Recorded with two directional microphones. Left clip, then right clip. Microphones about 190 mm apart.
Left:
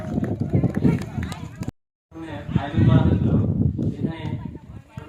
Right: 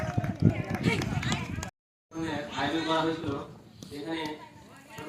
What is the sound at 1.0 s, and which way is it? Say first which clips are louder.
Run: right 2 dB; 40° left (ahead or behind).